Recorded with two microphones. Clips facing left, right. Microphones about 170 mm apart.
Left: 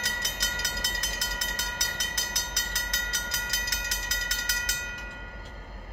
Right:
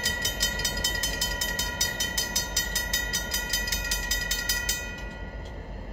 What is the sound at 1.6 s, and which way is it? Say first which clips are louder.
Train: right 3 dB; 25° right (ahead or behind).